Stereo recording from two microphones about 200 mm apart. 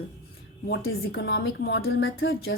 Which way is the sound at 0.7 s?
55° left (ahead or behind).